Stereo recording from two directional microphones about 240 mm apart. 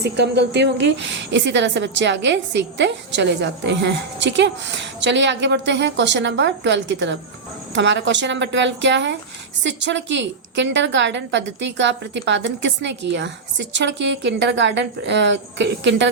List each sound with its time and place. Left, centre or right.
0.0 s a woman's voice: right